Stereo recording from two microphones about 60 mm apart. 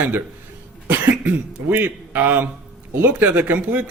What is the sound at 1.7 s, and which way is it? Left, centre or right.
Speech, right.